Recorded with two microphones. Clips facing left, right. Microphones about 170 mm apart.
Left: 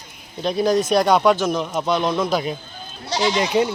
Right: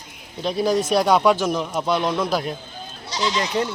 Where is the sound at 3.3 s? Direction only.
10° left (ahead or behind).